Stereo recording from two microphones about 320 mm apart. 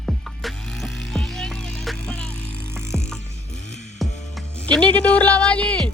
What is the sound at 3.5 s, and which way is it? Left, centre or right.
Music, left.